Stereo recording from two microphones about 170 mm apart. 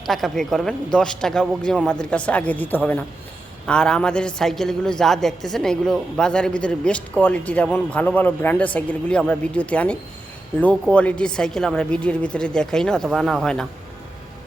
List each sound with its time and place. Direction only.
0.0 s a woman's voice: centre (ahead or behind)